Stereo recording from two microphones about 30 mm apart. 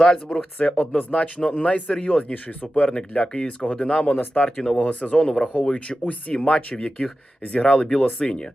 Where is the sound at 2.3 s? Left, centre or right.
Left.